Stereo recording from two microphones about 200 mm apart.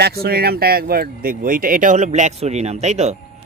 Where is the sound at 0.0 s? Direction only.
50° right (ahead or behind).